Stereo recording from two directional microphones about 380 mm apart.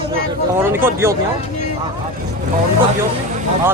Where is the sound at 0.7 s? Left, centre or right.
Centre.